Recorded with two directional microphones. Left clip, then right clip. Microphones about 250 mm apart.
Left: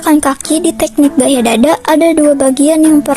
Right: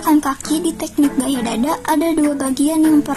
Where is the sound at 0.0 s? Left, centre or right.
Left.